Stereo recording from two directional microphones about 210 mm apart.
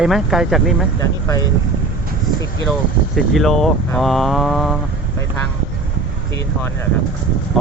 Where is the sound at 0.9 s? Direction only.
15° left (ahead or behind).